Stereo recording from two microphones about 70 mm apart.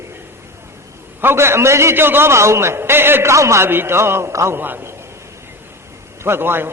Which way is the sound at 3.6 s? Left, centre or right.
Right.